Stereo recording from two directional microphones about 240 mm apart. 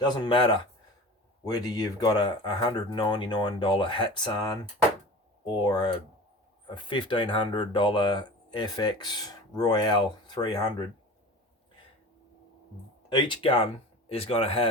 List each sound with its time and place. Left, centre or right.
0.0 s speech: centre
13.1 s speech: centre